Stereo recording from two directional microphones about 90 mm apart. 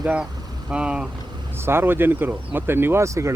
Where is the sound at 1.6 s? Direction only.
25° right (ahead or behind).